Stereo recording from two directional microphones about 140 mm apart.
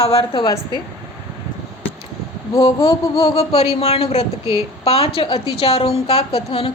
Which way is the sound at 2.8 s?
25° left (ahead or behind).